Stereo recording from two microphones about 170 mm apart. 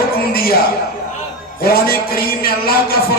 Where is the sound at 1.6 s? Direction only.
60° left (ahead or behind).